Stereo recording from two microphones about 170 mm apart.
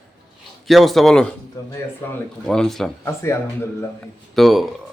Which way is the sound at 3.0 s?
15° left (ahead or behind).